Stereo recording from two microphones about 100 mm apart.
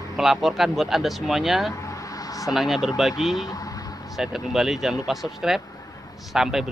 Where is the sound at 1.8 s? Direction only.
35° left (ahead or behind).